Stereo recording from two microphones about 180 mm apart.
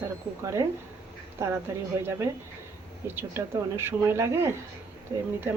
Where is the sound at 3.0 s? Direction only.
10° right (ahead or behind).